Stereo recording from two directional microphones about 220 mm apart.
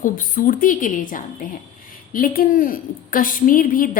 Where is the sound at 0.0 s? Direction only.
40° left (ahead or behind).